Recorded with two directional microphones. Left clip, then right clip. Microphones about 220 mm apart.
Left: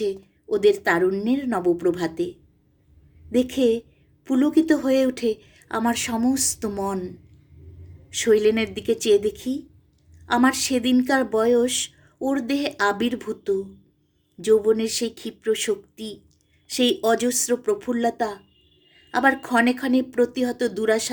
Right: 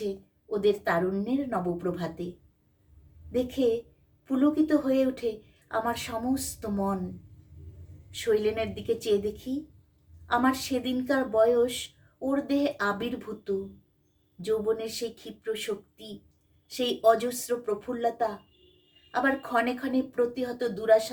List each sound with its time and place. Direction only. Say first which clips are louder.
0.5 s speech: left 7 dB; 45° left (ahead or behind)
3.3 s speech: left 6 dB; 45° left (ahead or behind)
8.1 s speech: left 8 dB; 45° left (ahead or behind)